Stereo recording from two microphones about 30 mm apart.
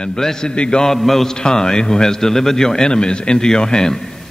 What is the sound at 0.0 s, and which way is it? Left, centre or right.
Speech, left.